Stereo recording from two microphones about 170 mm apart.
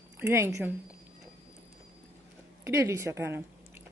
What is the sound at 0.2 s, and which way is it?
Speech, 15° right (ahead or behind).